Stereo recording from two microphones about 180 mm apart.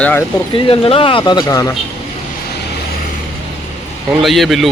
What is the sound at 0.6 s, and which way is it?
Speech, 30° left (ahead or behind).